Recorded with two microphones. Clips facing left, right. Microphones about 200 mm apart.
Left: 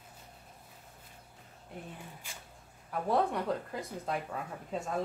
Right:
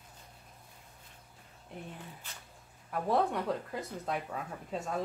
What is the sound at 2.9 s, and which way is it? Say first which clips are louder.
Speech: even; centre (ahead or behind).